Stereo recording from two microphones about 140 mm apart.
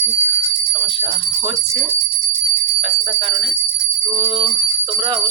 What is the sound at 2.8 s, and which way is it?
Bicycle bell, 35° right (ahead or behind).